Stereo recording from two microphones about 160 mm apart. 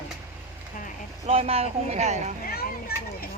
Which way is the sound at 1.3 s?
40° right (ahead or behind).